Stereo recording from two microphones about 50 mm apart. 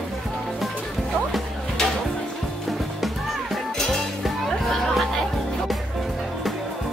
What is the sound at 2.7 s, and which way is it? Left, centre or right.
Music, centre.